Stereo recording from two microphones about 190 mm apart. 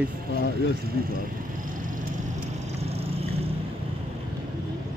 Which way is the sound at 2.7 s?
35° right (ahead or behind).